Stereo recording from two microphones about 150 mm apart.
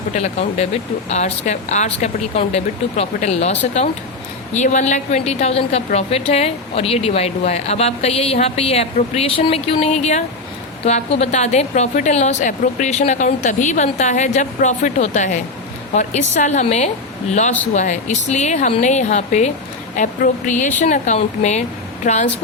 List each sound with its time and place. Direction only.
0.1 s a woman's voice: 50° left (ahead or behind)